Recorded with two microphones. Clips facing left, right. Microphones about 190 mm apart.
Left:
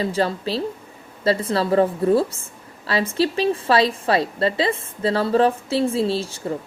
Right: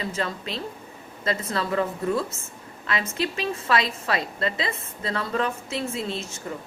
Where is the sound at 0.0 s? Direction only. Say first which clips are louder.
Left 8 dB; 30° left (ahead or behind).